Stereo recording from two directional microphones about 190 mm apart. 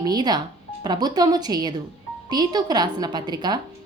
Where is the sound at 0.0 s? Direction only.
20° right (ahead or behind).